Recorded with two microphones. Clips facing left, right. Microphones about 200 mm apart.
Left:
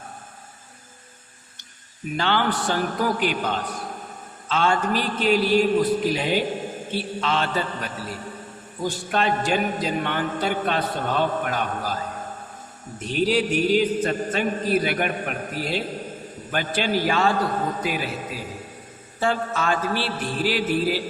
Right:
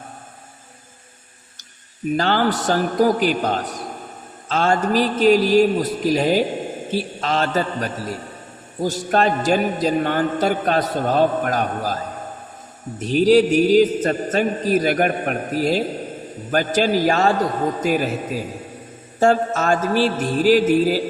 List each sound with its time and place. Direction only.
2.1 s a man's voice: 40° right (ahead or behind)
13.1 s a man's voice: 40° right (ahead or behind)